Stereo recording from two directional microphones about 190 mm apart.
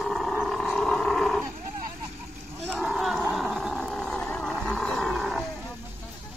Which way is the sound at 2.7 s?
Centre (ahead or behind).